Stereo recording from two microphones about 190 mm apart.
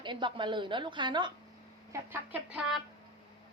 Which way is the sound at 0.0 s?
25° right (ahead or behind).